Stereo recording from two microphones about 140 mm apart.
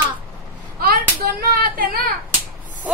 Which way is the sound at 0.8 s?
90° right.